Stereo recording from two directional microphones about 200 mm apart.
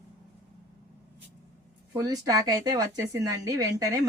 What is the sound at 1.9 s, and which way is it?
A woman's voice, 15° right (ahead or behind).